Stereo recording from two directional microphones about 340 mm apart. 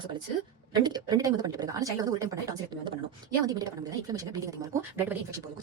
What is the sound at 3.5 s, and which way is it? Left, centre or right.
A woman's voice, centre.